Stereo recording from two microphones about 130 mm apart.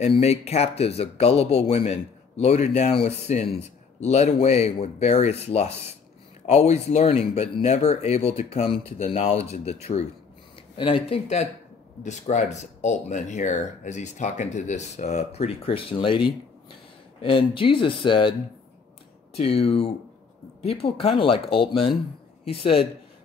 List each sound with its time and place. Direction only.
0.0 s speech: 55° left (ahead or behind)
10.8 s speech: 40° left (ahead or behind)
12.0 s speech: 65° left (ahead or behind); by 16.2 s 45° left (ahead or behind)
17.2 s speech: 45° left (ahead or behind)
19.6 s speech: 50° left (ahead or behind)